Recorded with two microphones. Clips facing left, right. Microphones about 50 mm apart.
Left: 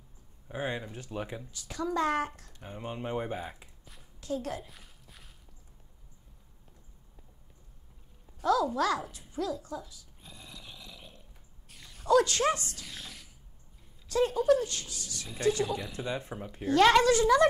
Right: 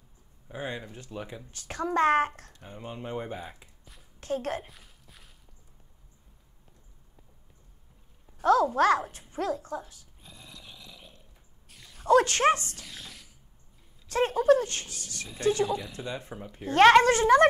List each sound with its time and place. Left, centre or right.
0.5 s speech: centre
1.5 s a woman's voice: right
2.6 s speech: centre
4.2 s a woman's voice: right
4.6 s a sound: centre
8.4 s a sound: right
8.7 s speech: right
10.2 s a sound: centre
12.1 s speech: right
12.8 s a sound: centre
14.0 s speech: right
15.7 s speech: centre
16.6 s speech: right